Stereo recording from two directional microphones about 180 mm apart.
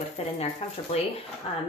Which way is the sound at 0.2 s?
35° left (ahead or behind).